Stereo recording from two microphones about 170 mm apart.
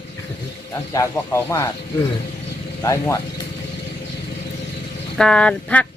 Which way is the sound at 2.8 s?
15° left (ahead or behind).